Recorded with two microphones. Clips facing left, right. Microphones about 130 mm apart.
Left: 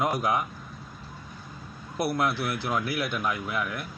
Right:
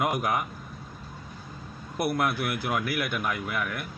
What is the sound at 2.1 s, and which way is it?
A man's voice, 50° right (ahead or behind).